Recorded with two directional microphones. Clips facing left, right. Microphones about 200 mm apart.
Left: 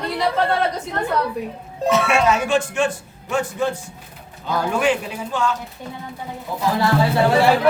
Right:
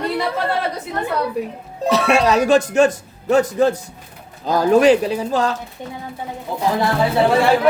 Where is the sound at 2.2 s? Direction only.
35° right (ahead or behind).